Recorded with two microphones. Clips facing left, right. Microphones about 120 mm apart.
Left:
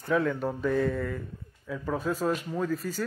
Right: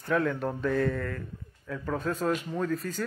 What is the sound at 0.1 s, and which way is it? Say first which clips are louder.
Speech: left 1 dB; centre (ahead or behind).